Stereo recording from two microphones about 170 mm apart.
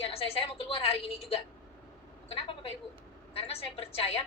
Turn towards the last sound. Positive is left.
turn(degrees=35)  # may be behind; listen again after turning